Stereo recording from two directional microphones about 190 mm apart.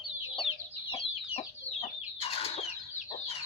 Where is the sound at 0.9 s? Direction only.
30° left (ahead or behind).